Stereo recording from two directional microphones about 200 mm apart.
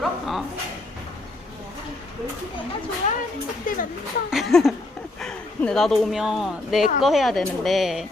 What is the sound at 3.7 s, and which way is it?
Speech, 40° left (ahead or behind).